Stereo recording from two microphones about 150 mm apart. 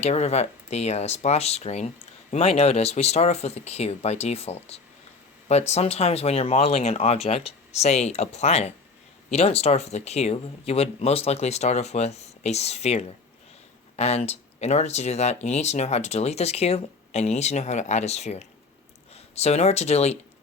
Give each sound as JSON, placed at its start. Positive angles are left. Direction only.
{"t": 0.0, "sound": "speech", "side_deg": 45}